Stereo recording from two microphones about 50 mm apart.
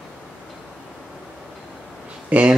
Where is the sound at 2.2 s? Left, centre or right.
Right.